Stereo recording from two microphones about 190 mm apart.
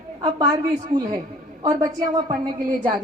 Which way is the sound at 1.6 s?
20° right (ahead or behind).